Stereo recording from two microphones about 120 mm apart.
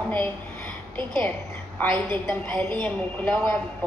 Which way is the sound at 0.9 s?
10° left (ahead or behind).